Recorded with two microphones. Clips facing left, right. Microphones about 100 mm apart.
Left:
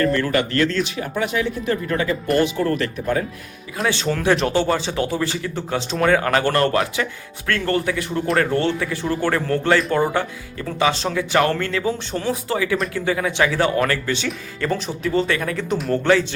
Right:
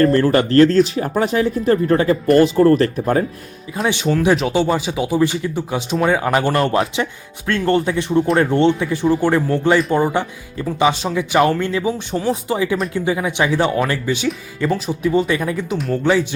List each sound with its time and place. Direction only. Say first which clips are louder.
0.0 s speech: right 5 dB; 35° right (ahead or behind)
3.8 s speech: right 3 dB; 15° right (ahead or behind)
15.7 s speech: left 3 dB; centre (ahead or behind)